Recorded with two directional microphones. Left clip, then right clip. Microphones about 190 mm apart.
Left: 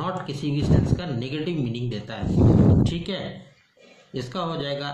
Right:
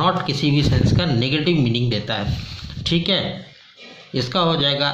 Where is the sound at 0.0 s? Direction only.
25° right (ahead or behind).